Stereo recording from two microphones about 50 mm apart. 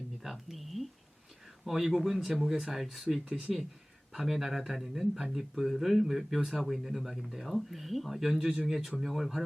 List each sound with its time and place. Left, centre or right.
0.2 s a sound: centre
1.6 s speech: centre
4.1 s speech: centre